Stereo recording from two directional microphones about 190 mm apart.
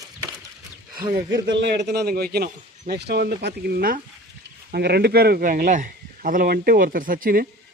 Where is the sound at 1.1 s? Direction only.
65° right (ahead or behind).